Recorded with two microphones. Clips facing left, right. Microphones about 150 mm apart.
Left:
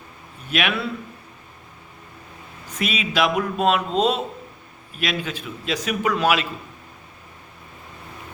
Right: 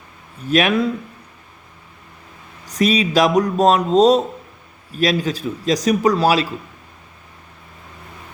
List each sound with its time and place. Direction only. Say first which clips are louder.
0.4 s a man's voice: right 8 dB; 40° right (ahead or behind)
2.6 s a man's voice: right 9 dB; 40° right (ahead or behind)